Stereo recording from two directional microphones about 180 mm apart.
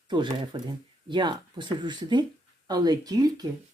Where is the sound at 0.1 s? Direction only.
25° right (ahead or behind).